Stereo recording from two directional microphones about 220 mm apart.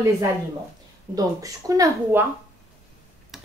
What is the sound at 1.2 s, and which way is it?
Speech, 15° right (ahead or behind).